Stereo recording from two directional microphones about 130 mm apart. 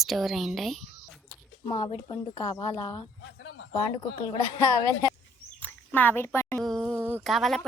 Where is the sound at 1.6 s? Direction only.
25° left (ahead or behind).